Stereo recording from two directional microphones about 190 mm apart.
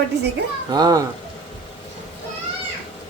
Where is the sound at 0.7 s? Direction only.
20° right (ahead or behind).